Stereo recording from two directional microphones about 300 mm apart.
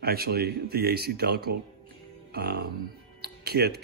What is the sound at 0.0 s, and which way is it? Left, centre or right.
Speech, right.